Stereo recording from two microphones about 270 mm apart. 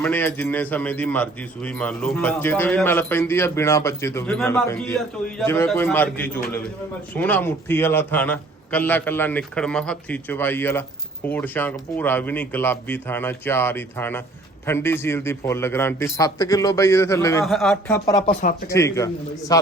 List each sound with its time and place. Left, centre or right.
0.0 s a man's voice: centre
18.2 s speech: left
18.7 s a man's voice: centre